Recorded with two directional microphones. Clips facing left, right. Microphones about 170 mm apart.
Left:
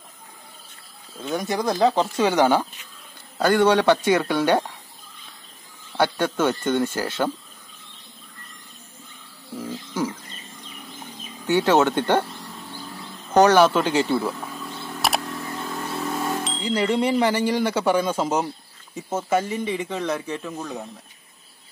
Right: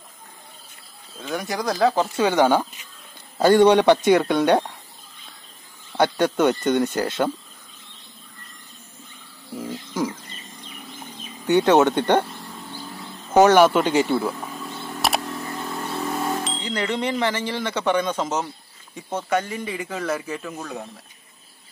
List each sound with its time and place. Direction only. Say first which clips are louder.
1.2 s speech: left 2 dB; centre (ahead or behind)
2.2 s speech: right 1 dB; 10° left (ahead or behind)
3.3 s a man's voice: right 3 dB; 20° right (ahead or behind)
5.9 s a man's voice: right 2 dB; 15° right (ahead or behind)
9.6 s bird: right 1 dB; 10° right (ahead or behind)
11.4 s a man's voice: right 2 dB; 15° right (ahead or behind)
13.3 s speech: right 1 dB; 10° right (ahead or behind)
15.0 s a sound: right 1 dB; centre (ahead or behind)
18.9 s speech: left 1 dB; 5° left (ahead or behind)